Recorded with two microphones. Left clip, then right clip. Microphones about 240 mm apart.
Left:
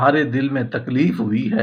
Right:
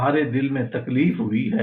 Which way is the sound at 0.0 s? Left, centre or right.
Left.